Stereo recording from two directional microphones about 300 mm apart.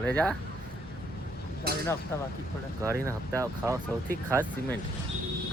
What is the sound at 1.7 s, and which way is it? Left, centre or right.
Chink, right.